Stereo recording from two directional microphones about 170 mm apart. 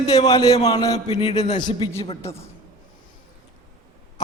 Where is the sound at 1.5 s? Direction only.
25° left (ahead or behind).